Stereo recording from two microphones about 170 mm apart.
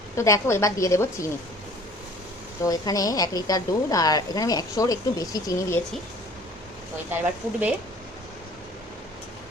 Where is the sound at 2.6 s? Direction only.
20° left (ahead or behind).